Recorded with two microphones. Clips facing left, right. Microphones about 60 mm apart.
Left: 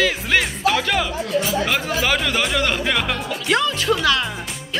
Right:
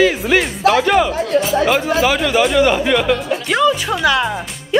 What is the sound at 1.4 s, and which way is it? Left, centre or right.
Speech, centre.